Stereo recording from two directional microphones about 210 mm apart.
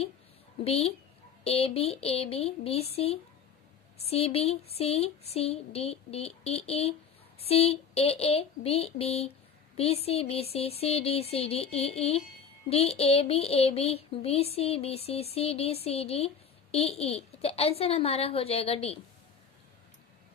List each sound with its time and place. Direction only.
0.6 s speech: 30° left (ahead or behind)